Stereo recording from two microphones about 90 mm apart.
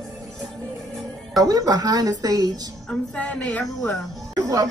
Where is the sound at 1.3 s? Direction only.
45° right (ahead or behind).